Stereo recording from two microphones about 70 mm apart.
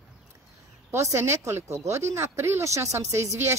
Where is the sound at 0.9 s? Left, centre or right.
Right.